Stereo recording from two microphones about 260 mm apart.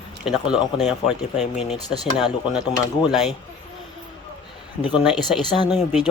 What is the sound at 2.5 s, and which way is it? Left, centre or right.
Speech, centre.